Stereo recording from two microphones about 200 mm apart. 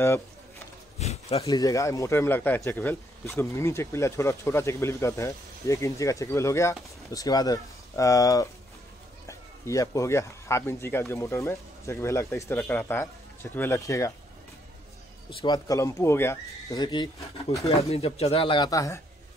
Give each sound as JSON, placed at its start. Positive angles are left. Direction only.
{"t": 0.9, "sound": "a sound", "side_deg": 30}
{"t": 1.5, "sound": "speech", "side_deg": 15}
{"t": 15.2, "sound": "speech", "side_deg": 20}